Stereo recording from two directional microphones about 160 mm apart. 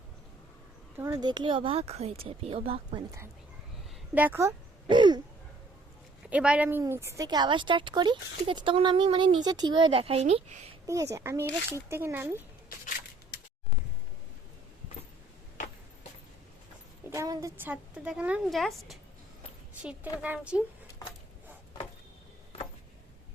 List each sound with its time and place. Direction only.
0.9 s speech: 20° right (ahead or behind)
4.1 s a woman's voice: 10° right (ahead or behind)
4.9 s a sound: 30° right (ahead or behind)
6.3 s a woman's voice: 10° right (ahead or behind); by 10.4 s 40° right (ahead or behind)
10.8 s a woman's voice: 20° right (ahead or behind)
12.6 s a sound: 65° left (ahead or behind)
17.1 s a woman's voice: 20° right (ahead or behind)